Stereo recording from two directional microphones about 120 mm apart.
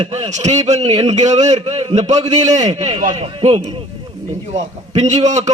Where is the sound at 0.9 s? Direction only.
60° right (ahead or behind).